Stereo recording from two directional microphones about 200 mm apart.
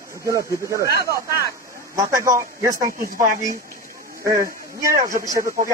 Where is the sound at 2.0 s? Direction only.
15° right (ahead or behind).